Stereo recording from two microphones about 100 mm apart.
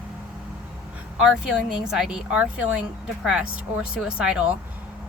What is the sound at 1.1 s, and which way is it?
A woman's voice, 5° right (ahead or behind).